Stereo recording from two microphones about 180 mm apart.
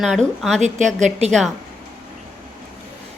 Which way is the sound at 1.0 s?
40° right (ahead or behind).